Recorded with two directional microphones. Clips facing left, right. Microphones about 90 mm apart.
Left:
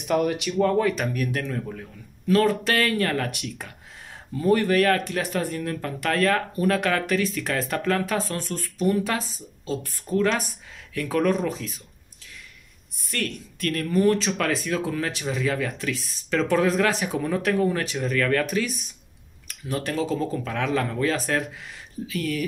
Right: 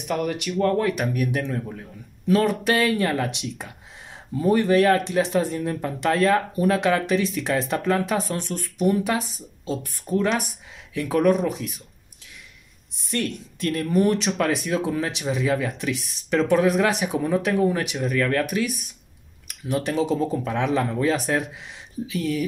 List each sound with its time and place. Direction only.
0.1 s speech: centre (ahead or behind); by 11.8 s 15° right (ahead or behind)
13.1 s speech: 20° right (ahead or behind)